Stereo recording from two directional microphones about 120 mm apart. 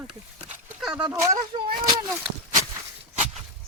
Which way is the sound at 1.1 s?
25° right (ahead or behind).